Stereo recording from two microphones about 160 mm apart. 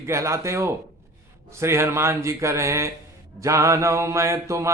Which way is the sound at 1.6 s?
15° right (ahead or behind).